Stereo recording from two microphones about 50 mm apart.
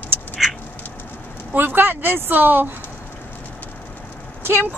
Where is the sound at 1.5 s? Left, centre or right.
Right.